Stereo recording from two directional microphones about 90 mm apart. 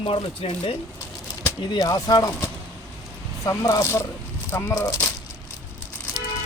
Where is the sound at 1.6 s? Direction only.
55° left (ahead or behind).